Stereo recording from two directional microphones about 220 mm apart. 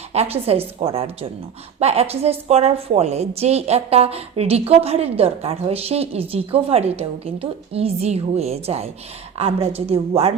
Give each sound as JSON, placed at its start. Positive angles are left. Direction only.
{"t": 0.1, "sound": "a woman's voice", "side_deg": -30}